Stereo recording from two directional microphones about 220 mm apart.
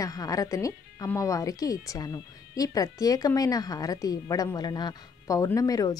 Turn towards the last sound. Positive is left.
turn(degrees=15)  # may be behind; listen again after turning